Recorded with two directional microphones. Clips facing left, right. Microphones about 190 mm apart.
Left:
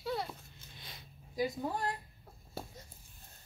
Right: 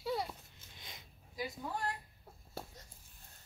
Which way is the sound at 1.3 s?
35° left (ahead or behind).